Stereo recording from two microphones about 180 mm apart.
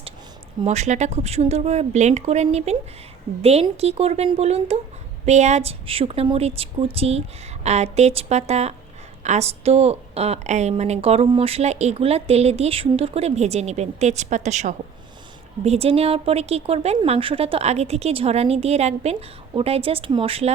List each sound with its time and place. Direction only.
0.6 s a woman's voice: 40° right (ahead or behind)